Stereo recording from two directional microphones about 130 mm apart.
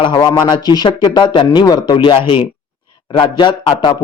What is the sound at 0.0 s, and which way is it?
Speech, 35° left (ahead or behind).